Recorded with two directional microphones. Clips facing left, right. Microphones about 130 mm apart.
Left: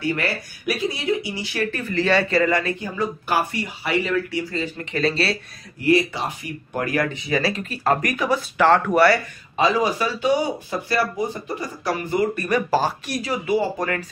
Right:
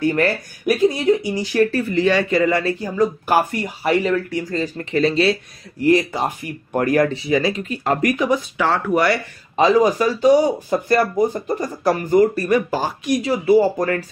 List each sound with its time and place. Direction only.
0.0 s speech: 45° right (ahead or behind)
2.0 s speech: 15° right (ahead or behind)
2.5 s speech: 35° right (ahead or behind)
4.9 s speech: 20° right (ahead or behind)
5.8 s speech: 40° right (ahead or behind)
7.2 s speech: 20° right (ahead or behind)
8.5 s speech: 10° right (ahead or behind)
9.6 s speech: 40° right (ahead or behind)
12.4 s speech: 20° right (ahead or behind)
13.2 s speech: 30° right (ahead or behind)
13.6 s speech: 40° right (ahead or behind)